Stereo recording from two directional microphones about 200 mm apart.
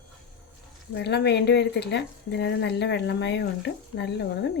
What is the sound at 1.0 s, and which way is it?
Speech, 60° left (ahead or behind).